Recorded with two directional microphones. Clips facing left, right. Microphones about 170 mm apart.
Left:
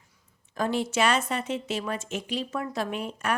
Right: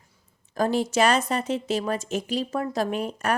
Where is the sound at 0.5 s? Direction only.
40° right (ahead or behind).